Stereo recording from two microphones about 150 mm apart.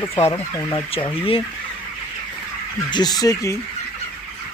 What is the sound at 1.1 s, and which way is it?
Speech, 40° left (ahead or behind).